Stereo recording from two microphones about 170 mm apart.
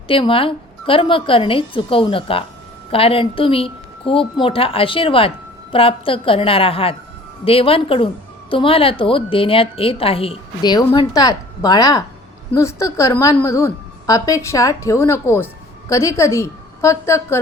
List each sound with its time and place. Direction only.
0.1 s a woman's voice: 30° left (ahead or behind); by 17.4 s 15° left (ahead or behind)